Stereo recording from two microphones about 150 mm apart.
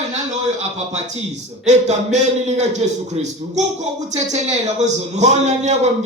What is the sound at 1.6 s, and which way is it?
A man's voice, 50° right (ahead or behind).